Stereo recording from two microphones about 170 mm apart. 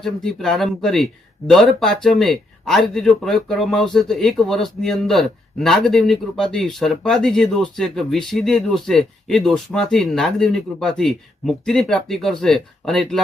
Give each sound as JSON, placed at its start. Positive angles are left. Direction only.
{"t": 0.0, "sound": "speech", "side_deg": 5}